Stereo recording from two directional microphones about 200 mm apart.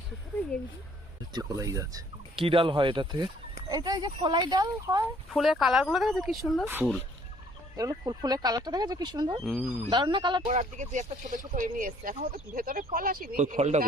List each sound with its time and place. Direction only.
1.3 s speech: 15° right (ahead or behind)
5.3 s speech: centre (ahead or behind)
7.8 s speech: 20° right (ahead or behind)
9.4 s speech: centre (ahead or behind)
9.9 s speech: 25° right (ahead or behind)
10.5 s speech: 35° right (ahead or behind)